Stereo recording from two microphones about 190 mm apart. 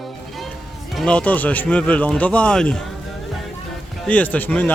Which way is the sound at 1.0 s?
5° left (ahead or behind).